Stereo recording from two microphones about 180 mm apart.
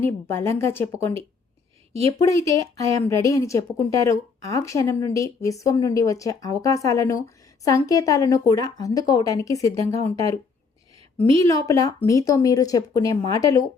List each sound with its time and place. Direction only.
0.3 s a woman's voice: 15° left (ahead or behind)
2.2 s a woman's voice: 15° left (ahead or behind)
11.4 s a woman's voice: 20° left (ahead or behind)